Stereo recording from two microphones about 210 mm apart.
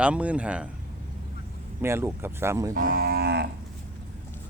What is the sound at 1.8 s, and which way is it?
Speech, 10° right (ahead or behind).